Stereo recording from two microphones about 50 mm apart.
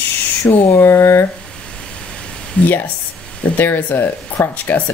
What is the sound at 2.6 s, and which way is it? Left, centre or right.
Speech, left.